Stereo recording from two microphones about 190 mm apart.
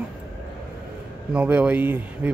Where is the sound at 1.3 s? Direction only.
5° right (ahead or behind).